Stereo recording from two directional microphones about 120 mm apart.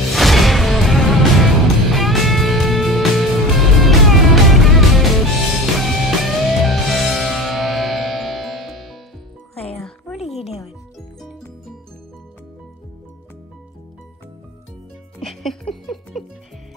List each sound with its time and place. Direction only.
0.1 s music: centre (ahead or behind)
10.1 s music: 60° left (ahead or behind)
15.1 s music: 5° left (ahead or behind)